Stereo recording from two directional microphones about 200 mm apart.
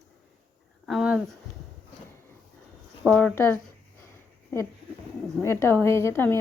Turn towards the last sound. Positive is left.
turn(degrees=10)  # may be behind; listen again after turning